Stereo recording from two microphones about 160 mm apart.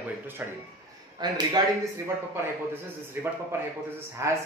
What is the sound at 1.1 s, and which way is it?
Speech, 25° right (ahead or behind).